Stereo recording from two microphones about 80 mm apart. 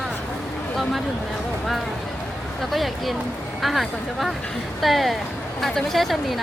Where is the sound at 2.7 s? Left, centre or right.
Centre.